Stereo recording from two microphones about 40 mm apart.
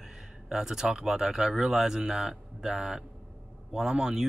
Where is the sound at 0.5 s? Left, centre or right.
Centre.